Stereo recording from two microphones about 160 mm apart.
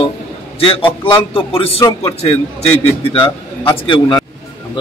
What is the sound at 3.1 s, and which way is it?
A man's voice, 30° left (ahead or behind).